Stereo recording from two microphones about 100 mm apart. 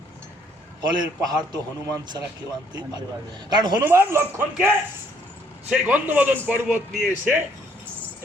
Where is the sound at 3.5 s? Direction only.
45° right (ahead or behind).